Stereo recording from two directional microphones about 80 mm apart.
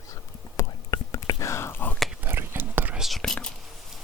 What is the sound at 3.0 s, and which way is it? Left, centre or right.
Whispering, centre.